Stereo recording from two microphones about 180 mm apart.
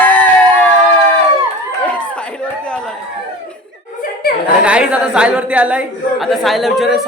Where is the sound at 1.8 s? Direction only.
5° left (ahead or behind).